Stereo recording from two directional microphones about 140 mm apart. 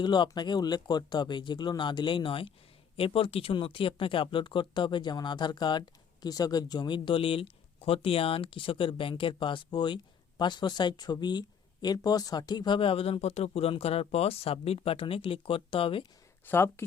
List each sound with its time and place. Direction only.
0.0 s speech: 30° left (ahead or behind)
16.5 s speech: 15° left (ahead or behind)